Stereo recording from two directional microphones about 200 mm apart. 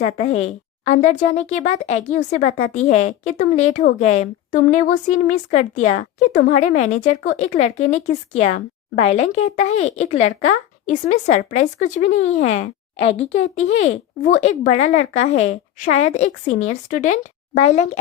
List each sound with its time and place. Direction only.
0.0 s a woman's voice: 35° left (ahead or behind)
14.4 s a woman's voice: 35° left (ahead or behind)